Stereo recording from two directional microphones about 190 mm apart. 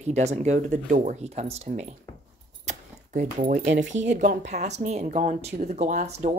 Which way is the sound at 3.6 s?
75° right (ahead or behind).